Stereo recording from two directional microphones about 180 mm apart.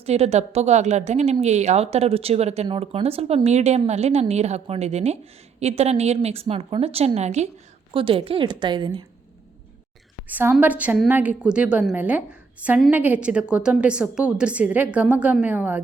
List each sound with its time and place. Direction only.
0.0 s a woman's voice: 35° right (ahead or behind)
10.2 s a woman's voice: 10° right (ahead or behind)